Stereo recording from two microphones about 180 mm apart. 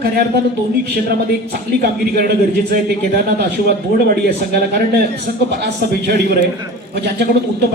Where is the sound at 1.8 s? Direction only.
60° right (ahead or behind).